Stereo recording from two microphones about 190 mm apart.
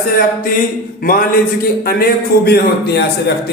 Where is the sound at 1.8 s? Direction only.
55° left (ahead or behind).